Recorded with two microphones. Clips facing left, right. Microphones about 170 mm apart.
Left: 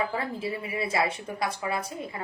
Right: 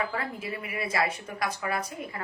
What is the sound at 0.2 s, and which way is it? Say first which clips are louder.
A woman's voice: left 3 dB; 25° left (ahead or behind).